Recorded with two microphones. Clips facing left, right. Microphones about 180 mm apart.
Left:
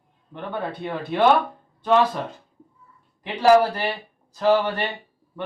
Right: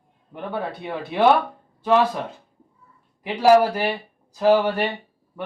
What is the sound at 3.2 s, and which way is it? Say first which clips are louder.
Speech: right 1 dB; 10° right (ahead or behind).